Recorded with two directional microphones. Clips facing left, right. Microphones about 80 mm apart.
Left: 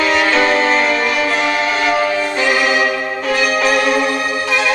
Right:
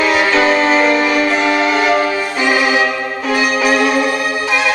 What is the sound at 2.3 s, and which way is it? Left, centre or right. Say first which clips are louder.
Music: right 3 dB; centre.